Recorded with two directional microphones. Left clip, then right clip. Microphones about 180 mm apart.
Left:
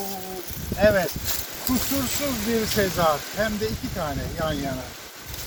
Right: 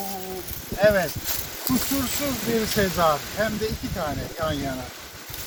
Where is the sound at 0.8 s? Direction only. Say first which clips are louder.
Even; centre (ahead or behind).